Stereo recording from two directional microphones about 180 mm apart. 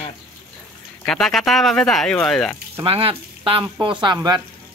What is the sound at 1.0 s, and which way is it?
Speech, centre (ahead or behind).